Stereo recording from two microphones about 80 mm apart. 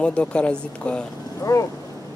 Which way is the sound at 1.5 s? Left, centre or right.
Left.